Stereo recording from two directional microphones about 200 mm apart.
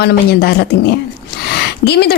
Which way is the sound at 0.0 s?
55° left (ahead or behind).